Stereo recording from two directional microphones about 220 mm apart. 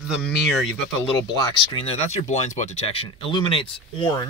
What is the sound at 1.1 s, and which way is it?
Speech, 15° left (ahead or behind).